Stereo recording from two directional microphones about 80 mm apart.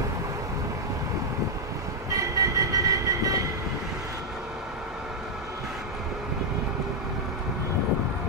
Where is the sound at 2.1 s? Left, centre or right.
Right.